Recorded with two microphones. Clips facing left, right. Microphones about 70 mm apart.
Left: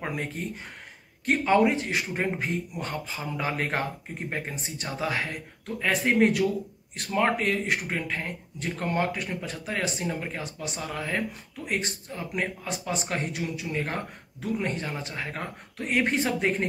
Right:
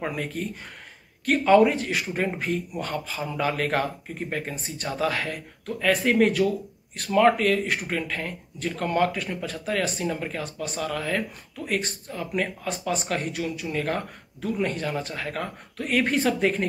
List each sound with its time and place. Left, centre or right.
0.1 s speech: left